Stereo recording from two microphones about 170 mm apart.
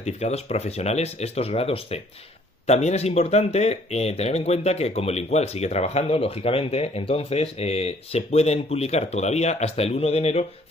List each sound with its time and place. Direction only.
0.0 s speech: 40° left (ahead or behind)